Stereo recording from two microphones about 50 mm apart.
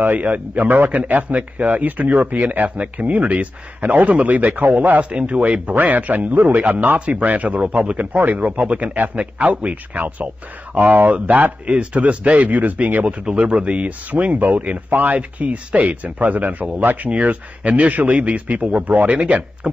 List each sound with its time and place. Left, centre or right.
0.0 s a man's voice: right